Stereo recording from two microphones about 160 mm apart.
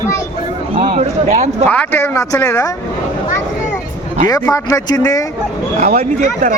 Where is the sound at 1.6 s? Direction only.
10° left (ahead or behind).